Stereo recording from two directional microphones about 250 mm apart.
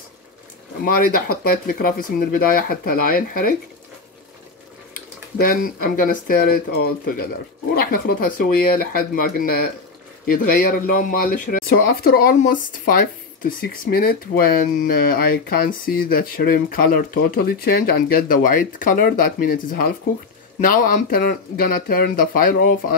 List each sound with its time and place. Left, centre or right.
0.8 s speech: left
4.9 s speech: left